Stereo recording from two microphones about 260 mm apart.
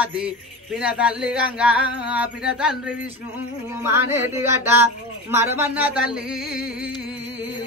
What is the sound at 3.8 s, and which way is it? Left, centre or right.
Speech, centre.